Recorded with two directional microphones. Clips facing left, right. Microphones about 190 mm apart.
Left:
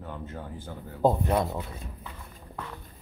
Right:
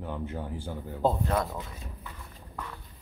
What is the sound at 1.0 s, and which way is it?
Speech, 15° left (ahead or behind).